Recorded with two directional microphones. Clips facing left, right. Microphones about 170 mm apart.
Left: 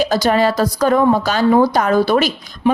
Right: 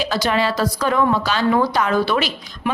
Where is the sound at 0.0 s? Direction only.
40° left (ahead or behind).